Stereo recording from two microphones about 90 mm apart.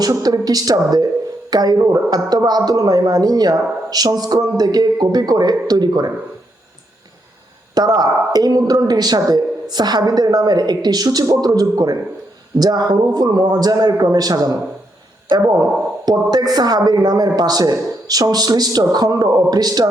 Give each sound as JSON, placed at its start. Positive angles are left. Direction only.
{"t": 0.0, "sound": "speech", "side_deg": -45}
{"t": 7.8, "sound": "speech", "side_deg": -45}